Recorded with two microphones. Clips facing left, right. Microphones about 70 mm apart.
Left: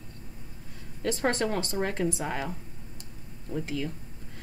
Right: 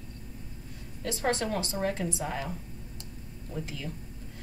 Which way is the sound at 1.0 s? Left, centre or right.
Left.